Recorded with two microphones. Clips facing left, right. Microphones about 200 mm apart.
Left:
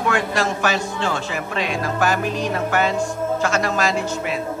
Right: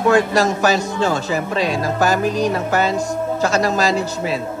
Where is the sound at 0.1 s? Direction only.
40° right (ahead or behind).